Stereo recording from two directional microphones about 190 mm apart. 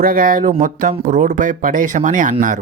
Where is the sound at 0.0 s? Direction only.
45° right (ahead or behind).